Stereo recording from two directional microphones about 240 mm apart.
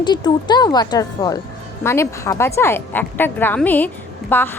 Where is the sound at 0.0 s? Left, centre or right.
Centre.